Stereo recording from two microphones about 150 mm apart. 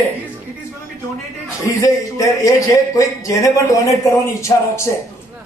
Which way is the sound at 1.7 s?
20° left (ahead or behind).